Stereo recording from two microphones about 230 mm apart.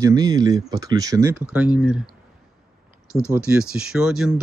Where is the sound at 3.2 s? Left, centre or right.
Centre.